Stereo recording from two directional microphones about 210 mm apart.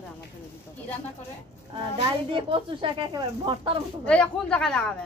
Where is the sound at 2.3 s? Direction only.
25° right (ahead or behind).